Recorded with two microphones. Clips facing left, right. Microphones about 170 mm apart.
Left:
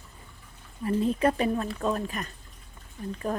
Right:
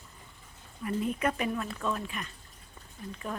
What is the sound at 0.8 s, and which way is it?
Speech, 30° left (ahead or behind).